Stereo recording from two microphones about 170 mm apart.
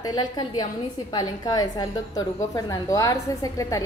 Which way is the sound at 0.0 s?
25° left (ahead or behind).